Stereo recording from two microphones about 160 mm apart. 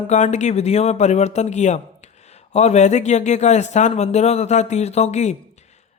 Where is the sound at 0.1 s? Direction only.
45° left (ahead or behind).